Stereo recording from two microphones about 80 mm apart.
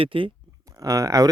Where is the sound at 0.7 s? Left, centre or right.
Right.